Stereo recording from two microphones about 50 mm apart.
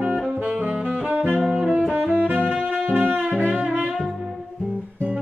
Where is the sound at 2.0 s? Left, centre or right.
Right.